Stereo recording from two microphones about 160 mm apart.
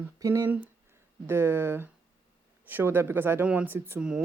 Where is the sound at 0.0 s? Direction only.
20° right (ahead or behind).